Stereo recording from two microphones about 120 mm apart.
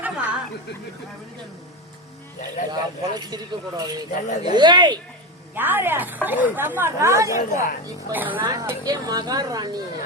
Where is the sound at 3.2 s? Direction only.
35° right (ahead or behind).